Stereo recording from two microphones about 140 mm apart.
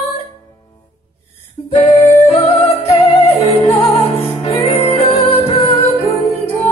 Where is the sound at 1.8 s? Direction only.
40° left (ahead or behind).